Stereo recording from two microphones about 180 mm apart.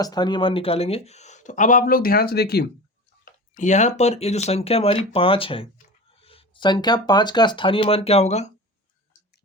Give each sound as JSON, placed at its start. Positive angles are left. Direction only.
{"t": 0.0, "sound": "speech", "side_deg": 25}
{"t": 3.2, "sound": "speech", "side_deg": 45}